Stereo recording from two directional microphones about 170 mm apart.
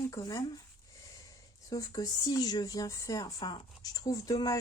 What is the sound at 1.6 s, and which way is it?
Speech, 20° left (ahead or behind).